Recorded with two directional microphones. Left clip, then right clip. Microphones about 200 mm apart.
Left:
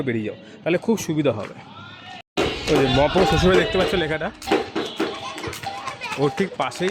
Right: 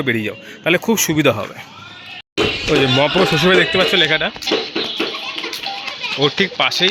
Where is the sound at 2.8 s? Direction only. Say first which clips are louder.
Right 3 dB; centre (ahead or behind).